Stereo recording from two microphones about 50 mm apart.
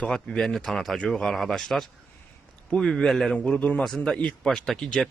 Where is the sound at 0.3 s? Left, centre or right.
Centre.